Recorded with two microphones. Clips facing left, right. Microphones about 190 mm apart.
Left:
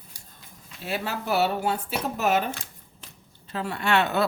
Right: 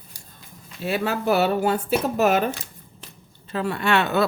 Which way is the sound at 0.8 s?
60° right (ahead or behind).